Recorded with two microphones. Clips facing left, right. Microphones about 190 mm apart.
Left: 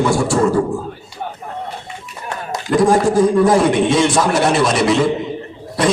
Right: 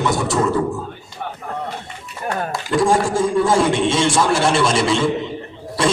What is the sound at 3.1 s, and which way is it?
Speech, 25° right (ahead or behind).